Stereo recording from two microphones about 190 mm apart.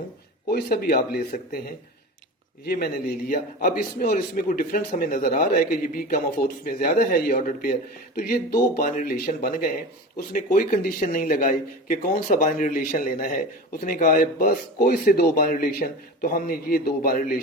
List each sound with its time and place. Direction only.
0.5 s a man's voice: 50° left (ahead or behind)
2.6 s a man's voice: 55° left (ahead or behind)